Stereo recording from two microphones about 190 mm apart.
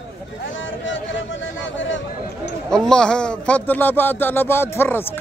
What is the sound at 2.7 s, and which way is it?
Speech, 5° left (ahead or behind).